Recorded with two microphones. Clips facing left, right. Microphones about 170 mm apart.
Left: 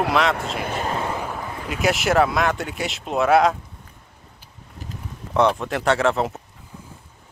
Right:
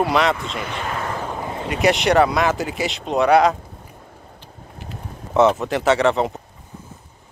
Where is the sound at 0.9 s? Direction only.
15° left (ahead or behind).